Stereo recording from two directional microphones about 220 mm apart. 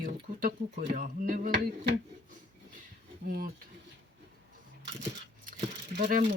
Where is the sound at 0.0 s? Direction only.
40° right (ahead or behind).